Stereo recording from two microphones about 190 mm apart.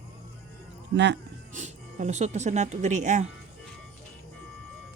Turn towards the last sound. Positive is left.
turn(degrees=-40)  # may be behind; listen again after turning